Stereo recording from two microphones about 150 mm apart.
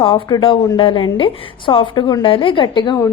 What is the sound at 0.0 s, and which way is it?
A woman's voice, 30° left (ahead or behind).